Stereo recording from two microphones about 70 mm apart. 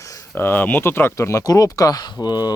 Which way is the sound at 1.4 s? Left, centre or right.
Left.